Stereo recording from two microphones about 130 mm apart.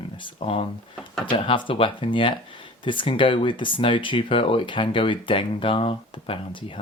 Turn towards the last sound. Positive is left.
turn(degrees=45)  # may be behind; listen again after turning